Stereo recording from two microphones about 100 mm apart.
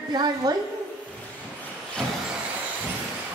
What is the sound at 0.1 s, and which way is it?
Speech, 45° right (ahead or behind).